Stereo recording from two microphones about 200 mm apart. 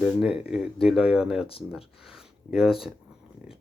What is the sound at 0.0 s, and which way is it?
Speech, 5° right (ahead or behind).